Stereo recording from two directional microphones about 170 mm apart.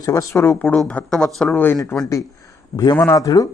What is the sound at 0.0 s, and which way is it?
Speech, 20° left (ahead or behind).